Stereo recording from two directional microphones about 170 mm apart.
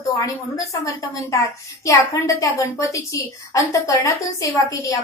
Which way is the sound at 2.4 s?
15° left (ahead or behind).